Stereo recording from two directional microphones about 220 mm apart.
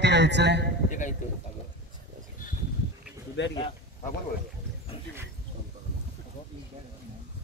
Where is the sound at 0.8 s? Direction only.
35° left (ahead or behind).